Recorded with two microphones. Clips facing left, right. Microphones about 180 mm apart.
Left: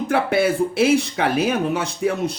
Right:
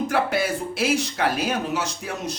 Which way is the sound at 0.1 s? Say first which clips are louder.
Left 4 dB; 55° left (ahead or behind).